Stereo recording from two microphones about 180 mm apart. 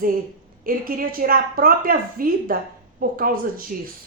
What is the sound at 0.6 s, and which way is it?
A woman's voice, 50° right (ahead or behind).